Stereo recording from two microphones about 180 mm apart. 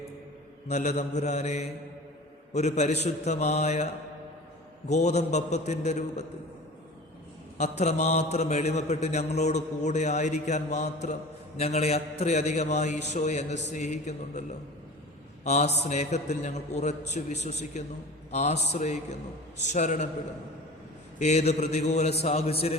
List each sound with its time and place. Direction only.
0.7 s a man's voice: 40° left (ahead or behind)
4.9 s a man's voice: 40° left (ahead or behind)
7.6 s a man's voice: 40° left (ahead or behind)
15.4 s a man's voice: 40° left (ahead or behind)
21.2 s a man's voice: 40° left (ahead or behind)